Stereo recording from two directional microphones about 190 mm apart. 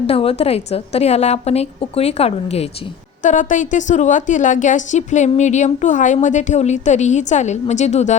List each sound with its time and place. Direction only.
0.1 s a woman's voice: 30° left (ahead or behind)